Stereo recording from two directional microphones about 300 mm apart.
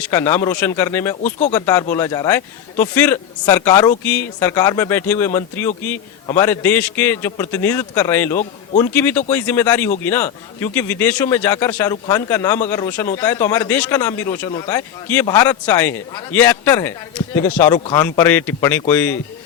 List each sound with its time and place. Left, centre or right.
0.0 s a man's voice: centre
1.2 s speech: left
1.5 s a man's voice: centre